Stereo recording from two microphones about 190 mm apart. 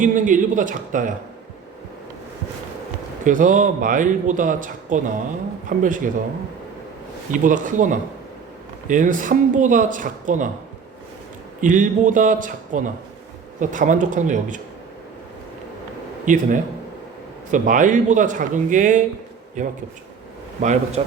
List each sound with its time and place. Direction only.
0.0 s speech: 40° right (ahead or behind)
3.2 s speech: 40° right (ahead or behind)
7.4 s speech: 45° right (ahead or behind)
11.6 s a man's voice: 45° right (ahead or behind)
16.2 s a man's voice: 40° right (ahead or behind)